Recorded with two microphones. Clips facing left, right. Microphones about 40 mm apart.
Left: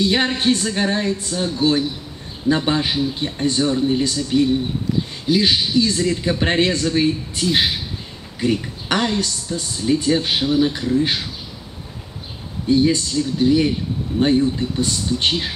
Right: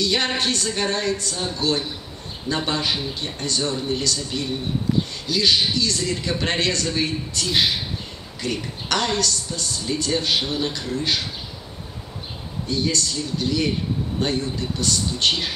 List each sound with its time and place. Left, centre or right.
0.0 s speech: left
5.2 s speech: left
12.6 s speech: left